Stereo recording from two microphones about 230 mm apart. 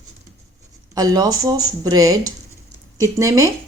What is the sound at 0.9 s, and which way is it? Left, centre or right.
Speech, centre.